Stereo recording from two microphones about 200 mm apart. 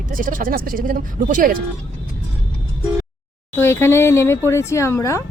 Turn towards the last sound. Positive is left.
turn(degrees=15)  # may be behind; listen again after turning